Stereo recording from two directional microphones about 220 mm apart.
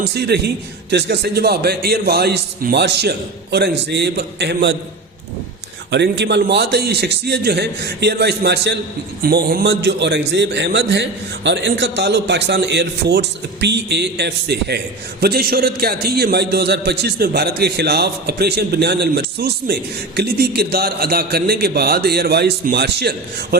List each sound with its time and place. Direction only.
0.1 s a man's voice: 50° right (ahead or behind)
5.9 s a man's voice: 50° right (ahead or behind)